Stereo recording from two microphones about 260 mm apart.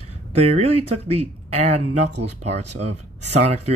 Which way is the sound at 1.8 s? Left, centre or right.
Right.